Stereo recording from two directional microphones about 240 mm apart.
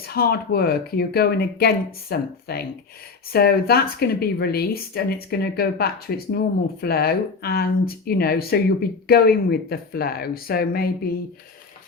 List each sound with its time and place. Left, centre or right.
0.0 s speech: left